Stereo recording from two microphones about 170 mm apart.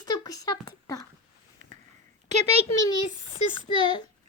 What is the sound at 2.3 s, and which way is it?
Speech, 40° right (ahead or behind).